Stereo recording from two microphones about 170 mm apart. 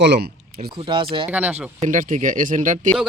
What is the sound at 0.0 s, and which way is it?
Speech, 80° right.